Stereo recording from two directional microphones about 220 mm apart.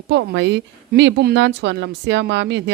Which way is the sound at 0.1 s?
55° right (ahead or behind).